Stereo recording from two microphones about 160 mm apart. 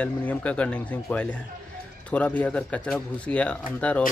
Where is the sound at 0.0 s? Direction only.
10° left (ahead or behind).